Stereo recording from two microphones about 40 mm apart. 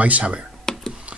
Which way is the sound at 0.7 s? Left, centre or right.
Centre.